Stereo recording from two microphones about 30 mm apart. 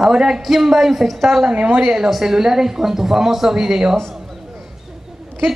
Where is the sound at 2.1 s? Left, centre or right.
Centre.